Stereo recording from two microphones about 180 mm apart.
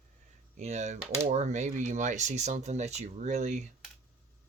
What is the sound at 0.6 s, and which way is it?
Speech, 40° right (ahead or behind).